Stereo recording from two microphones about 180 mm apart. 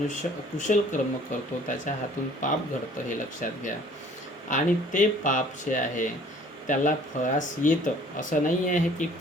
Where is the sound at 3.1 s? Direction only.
45° left (ahead or behind).